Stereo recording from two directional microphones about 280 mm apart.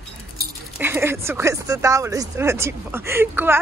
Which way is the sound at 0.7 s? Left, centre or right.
Centre.